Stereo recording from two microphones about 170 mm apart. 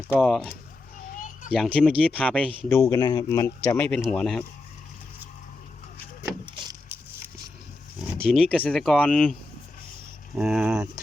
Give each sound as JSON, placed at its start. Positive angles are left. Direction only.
{"t": 0.1, "sound": "speech", "side_deg": 0}
{"t": 1.1, "sound": "children playing", "side_deg": 50}
{"t": 1.5, "sound": "speech", "side_deg": 0}
{"t": 6.7, "sound": "a sound", "side_deg": -10}
{"t": 8.2, "sound": "speech", "side_deg": 5}
{"t": 10.3, "sound": "speech", "side_deg": -5}